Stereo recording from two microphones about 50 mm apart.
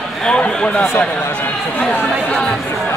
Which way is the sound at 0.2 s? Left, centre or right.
Centre.